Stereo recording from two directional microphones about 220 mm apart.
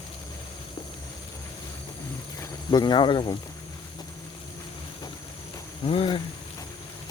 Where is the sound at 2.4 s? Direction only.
20° left (ahead or behind).